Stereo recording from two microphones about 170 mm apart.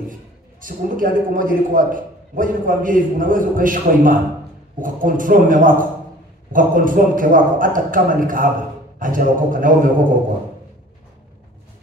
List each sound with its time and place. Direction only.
0.6 s a man's voice: 55° right (ahead or behind)